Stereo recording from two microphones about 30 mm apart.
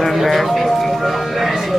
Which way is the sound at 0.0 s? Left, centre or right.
Centre.